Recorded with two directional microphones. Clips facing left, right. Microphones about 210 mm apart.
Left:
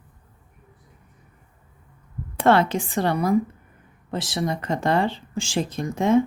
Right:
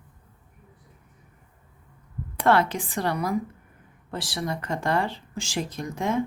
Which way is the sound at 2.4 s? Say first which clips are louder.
Left 3 dB; 25° left (ahead or behind).